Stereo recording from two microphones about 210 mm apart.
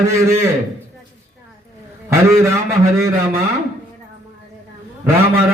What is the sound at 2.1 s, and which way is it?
A man's voice, 15° right (ahead or behind).